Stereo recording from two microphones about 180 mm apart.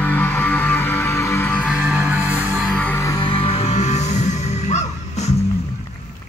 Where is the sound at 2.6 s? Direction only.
10° left (ahead or behind).